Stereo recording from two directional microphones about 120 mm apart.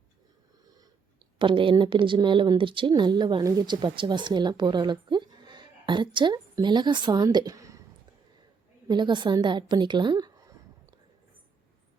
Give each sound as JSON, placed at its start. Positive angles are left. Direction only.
{"t": 1.4, "sound": "speech", "side_deg": -45}
{"t": 7.3, "sound": "a sound", "side_deg": -30}
{"t": 8.9, "sound": "speech", "side_deg": -40}